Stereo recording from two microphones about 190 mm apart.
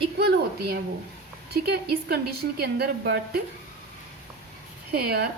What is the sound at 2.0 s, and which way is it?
A woman's voice, 55° right (ahead or behind).